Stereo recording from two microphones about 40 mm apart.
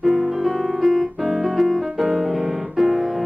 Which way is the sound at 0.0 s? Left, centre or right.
Centre.